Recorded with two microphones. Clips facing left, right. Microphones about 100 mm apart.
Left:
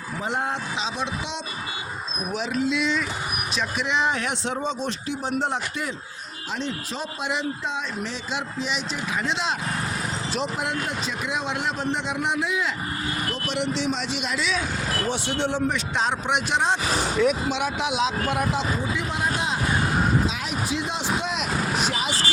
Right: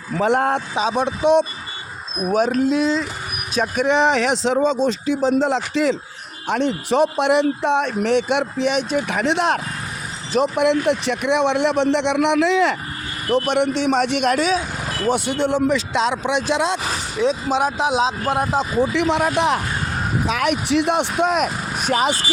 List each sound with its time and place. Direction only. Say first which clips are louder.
0.2 s speech: right 10 dB; 60° right (ahead or behind); by 3.1 s 35° right (ahead or behind)
3.5 s a man's voice: right 9 dB; 50° right (ahead or behind); by 6.0 s 90° right
6.5 s speech: right 11 dB; 65° right (ahead or behind)
10.5 s a man's voice: right 11 dB; 70° right (ahead or behind)
13.3 s speech: right 13 dB; 55° right (ahead or behind)
15.6 s speech: right 6 dB; 90° right
17.2 s speech: right 2 dB; 20° right (ahead or behind)
17.5 s speech: right 7 dB; 40° right (ahead or behind)
18.8 s a man's voice: right 9 dB; 80° right; by 22.1 s 50° right (ahead or behind)